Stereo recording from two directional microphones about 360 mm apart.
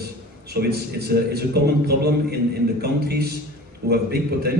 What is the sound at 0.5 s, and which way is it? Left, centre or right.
A man's voice, right.